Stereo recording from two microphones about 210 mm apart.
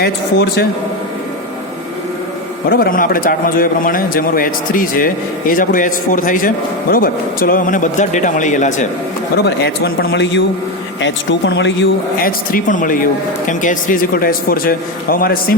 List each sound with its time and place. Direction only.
0.0 s speech: 50° left (ahead or behind)
2.6 s a man's voice: 45° left (ahead or behind)
9.4 s speech: 50° left (ahead or behind)
10.1 s speech: 60° left (ahead or behind)
12.2 s a man's voice: 40° left (ahead or behind)